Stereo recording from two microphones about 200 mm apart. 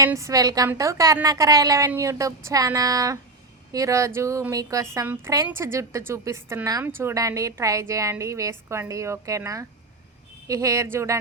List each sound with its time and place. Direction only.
0.0 s a woman's voice: 15° right (ahead or behind)